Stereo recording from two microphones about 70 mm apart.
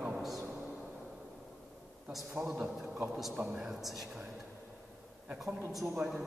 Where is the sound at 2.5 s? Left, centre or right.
Centre.